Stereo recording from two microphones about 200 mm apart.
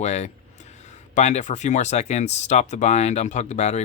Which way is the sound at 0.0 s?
35° left (ahead or behind).